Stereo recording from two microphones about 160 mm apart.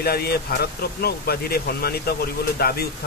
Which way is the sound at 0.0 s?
75° left (ahead or behind).